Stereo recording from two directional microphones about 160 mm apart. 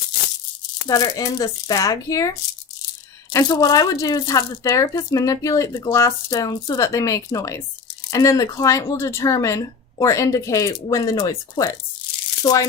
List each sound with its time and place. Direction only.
0.9 s speech: 20° left (ahead or behind)
3.3 s speech: 25° left (ahead or behind)